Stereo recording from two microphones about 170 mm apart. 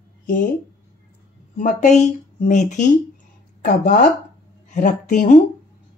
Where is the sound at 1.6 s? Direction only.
45° left (ahead or behind).